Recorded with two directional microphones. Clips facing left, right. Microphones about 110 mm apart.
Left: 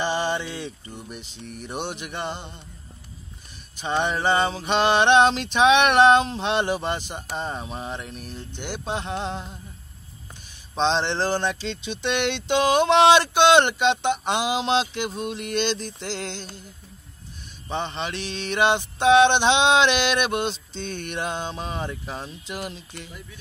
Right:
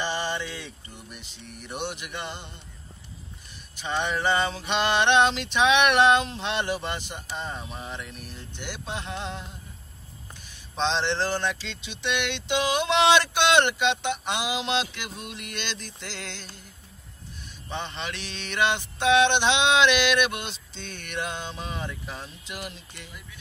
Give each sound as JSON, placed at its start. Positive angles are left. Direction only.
{"t": 0.1, "sound": "speech", "side_deg": 25}
{"t": 3.8, "sound": "speech", "side_deg": 30}
{"t": 10.7, "sound": "speech", "side_deg": 30}
{"t": 17.6, "sound": "a sound", "side_deg": 30}